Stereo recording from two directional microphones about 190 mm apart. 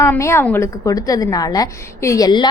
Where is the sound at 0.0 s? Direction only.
15° left (ahead or behind).